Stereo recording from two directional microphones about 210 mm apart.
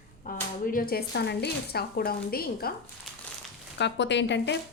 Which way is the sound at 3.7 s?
55° left (ahead or behind).